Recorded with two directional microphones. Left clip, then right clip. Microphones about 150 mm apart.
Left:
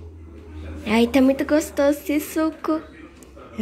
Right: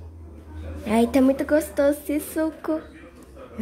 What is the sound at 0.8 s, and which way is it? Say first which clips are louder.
A woman's voice: left 2 dB; 10° right (ahead or behind).